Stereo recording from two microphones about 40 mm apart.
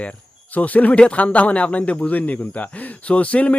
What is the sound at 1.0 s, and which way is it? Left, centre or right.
A man's voice, left.